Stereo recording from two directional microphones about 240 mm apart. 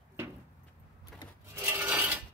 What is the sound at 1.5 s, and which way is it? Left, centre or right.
Mechanisms, centre.